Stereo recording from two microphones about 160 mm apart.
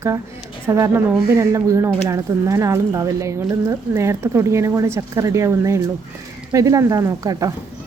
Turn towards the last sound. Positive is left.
turn(degrees=-20)  # may be behind; listen again after turning